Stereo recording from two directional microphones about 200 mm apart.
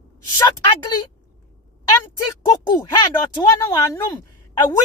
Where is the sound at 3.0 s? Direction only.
20° left (ahead or behind).